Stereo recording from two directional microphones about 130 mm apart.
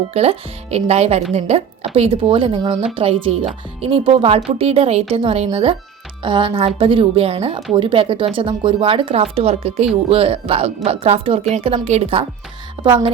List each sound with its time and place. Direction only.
0.1 s a woman's voice: 55° right (ahead or behind)
6.2 s a woman's voice: 40° right (ahead or behind)